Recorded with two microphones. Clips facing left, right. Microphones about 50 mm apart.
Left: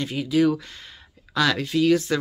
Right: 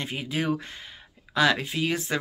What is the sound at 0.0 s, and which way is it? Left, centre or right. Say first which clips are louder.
Speech: left 8 dB; right.